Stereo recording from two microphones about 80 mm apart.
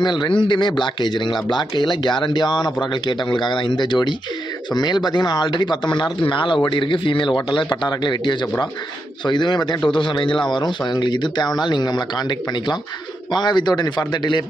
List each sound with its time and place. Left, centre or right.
0.0 s speech: left
4.7 s speech: left
9.8 s a man's voice: left